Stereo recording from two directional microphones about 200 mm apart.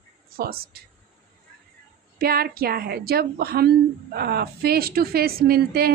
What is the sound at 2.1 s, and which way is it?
A woman's voice, 50° right (ahead or behind).